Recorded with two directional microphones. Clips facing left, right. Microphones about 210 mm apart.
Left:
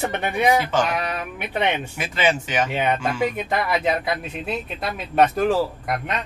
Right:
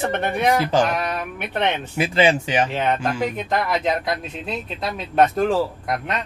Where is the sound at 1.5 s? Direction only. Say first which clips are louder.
Even; 10° left (ahead or behind).